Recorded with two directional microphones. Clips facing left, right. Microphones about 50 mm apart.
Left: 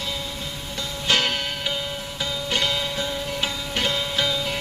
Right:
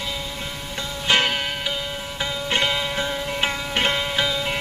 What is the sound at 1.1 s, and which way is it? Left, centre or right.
Music, right.